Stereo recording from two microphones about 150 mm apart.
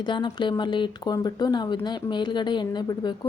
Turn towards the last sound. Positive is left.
turn(degrees=30)  # may be behind; listen again after turning